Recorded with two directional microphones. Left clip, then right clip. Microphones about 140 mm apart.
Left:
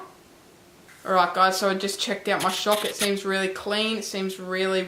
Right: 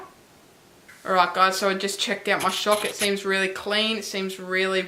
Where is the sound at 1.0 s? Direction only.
5° right (ahead or behind).